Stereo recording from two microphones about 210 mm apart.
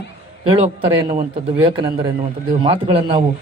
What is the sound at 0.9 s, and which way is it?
A man's voice, 20° right (ahead or behind).